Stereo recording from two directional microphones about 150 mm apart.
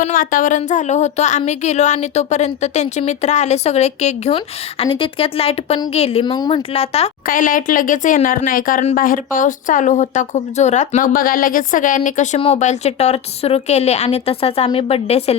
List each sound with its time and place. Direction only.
0.0 s a woman's voice: 65° left (ahead or behind); by 7.1 s 40° left (ahead or behind)
7.3 s speech: 65° left (ahead or behind); by 15.4 s 45° left (ahead or behind)